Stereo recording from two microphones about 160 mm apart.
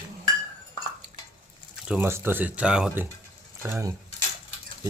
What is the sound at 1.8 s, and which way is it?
Speech, 10° right (ahead or behind).